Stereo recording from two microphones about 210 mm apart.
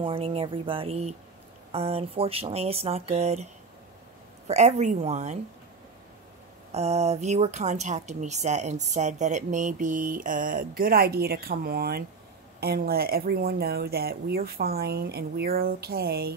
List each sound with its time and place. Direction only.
0.0 s speech: 25° right (ahead or behind)
4.5 s speech: 30° right (ahead or behind)
6.7 s speech: 30° right (ahead or behind); by 16.3 s 50° right (ahead or behind)